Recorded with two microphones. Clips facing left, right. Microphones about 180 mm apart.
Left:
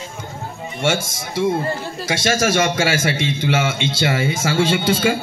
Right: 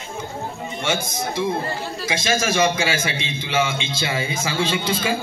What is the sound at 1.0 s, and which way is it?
Speech, 90° left.